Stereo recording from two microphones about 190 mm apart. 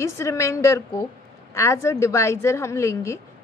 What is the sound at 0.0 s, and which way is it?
A woman's voice, 15° left (ahead or behind).